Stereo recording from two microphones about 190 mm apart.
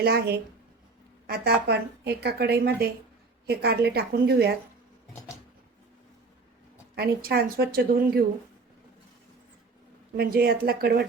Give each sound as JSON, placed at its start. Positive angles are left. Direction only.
{"t": 0.0, "sound": "a woman's voice", "side_deg": -55}
{"t": 6.9, "sound": "a woman's voice", "side_deg": -55}
{"t": 10.2, "sound": "a woman's voice", "side_deg": -55}